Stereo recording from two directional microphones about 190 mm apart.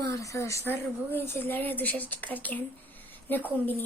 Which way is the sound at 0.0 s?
15° left (ahead or behind).